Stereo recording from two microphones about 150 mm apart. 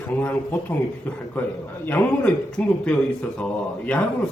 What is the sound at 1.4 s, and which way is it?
A man's voice, 10° left (ahead or behind).